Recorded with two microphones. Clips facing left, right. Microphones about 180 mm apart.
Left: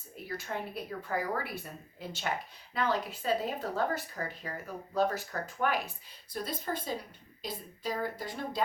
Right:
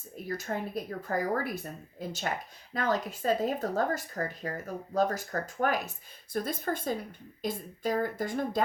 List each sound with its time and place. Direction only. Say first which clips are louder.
0.3 s speech: right 4 dB; 40° right (ahead or behind)